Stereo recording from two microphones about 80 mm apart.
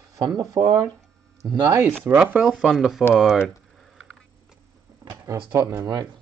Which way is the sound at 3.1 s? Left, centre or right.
Centre.